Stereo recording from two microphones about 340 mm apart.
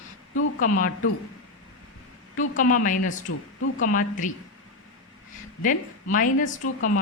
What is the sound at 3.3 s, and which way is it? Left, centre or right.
Speech, left.